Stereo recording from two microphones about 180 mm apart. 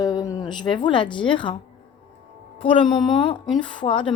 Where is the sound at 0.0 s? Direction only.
20° left (ahead or behind).